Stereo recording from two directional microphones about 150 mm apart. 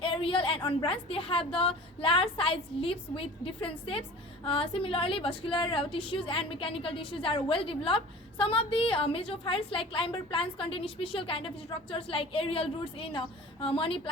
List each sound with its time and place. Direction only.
0.0 s a woman's voice: 35° left (ahead or behind)